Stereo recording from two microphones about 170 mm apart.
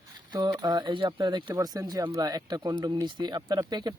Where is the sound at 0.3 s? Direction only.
20° right (ahead or behind).